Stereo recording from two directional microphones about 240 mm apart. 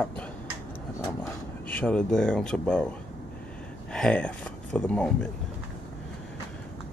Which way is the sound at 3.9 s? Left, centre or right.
Centre.